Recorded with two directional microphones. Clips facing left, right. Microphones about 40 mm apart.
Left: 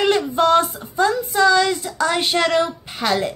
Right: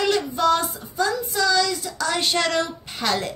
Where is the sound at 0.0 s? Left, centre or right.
Left.